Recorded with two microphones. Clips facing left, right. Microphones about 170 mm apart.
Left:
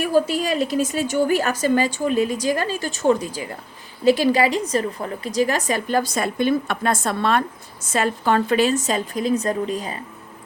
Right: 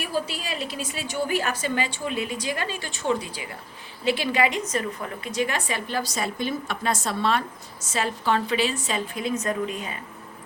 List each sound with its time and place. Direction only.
0.0 s a woman's voice: 45° left (ahead or behind)